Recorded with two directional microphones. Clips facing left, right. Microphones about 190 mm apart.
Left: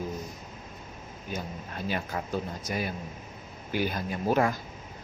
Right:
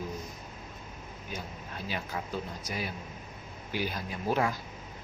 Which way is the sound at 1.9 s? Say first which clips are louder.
Left 4 dB; 50° left (ahead or behind).